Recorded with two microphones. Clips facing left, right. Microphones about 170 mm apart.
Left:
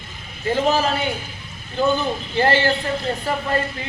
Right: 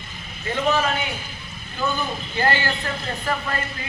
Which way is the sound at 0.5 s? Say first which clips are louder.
Left 2 dB; 35° left (ahead or behind).